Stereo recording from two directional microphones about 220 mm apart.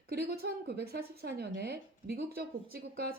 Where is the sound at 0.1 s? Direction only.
45° right (ahead or behind).